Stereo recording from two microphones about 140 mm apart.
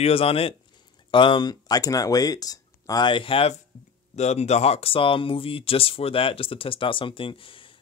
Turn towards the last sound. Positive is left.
turn(degrees=40)  # may be behind; listen again after turning